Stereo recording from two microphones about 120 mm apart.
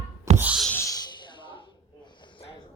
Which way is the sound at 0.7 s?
30° left (ahead or behind).